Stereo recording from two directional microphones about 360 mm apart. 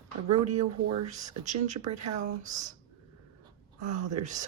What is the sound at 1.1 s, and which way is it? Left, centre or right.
Speech, centre.